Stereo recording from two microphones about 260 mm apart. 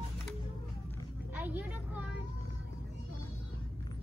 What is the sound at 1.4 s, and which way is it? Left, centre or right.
Vehicle, centre.